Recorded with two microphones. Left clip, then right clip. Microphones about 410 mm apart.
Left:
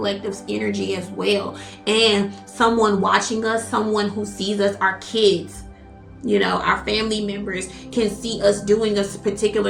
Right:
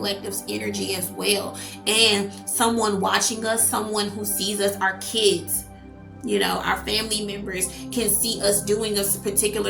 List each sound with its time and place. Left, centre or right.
0.0 s a woman's voice: right
6.3 s a woman's voice: right